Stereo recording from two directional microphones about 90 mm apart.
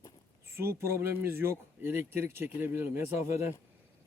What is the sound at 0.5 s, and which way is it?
Speech, 25° right (ahead or behind).